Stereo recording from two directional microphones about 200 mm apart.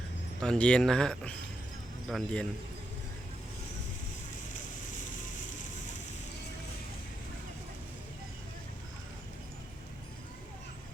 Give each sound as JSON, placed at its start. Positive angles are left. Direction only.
{"t": 0.3, "sound": "speech", "side_deg": 5}